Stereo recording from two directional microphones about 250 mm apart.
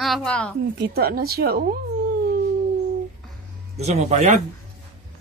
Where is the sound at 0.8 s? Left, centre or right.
Right.